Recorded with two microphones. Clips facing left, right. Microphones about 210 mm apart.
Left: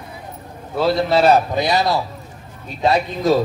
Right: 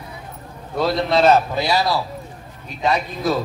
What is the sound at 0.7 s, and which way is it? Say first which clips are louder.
A man's voice: left 2 dB; 5° left (ahead or behind).